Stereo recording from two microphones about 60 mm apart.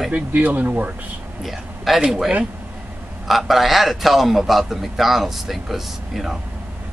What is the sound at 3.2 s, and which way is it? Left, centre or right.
A man's voice, centre.